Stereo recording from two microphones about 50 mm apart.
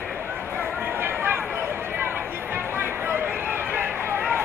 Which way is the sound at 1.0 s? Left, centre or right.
Right.